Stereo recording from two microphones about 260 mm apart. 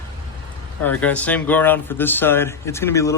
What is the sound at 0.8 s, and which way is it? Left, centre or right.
Speech, centre.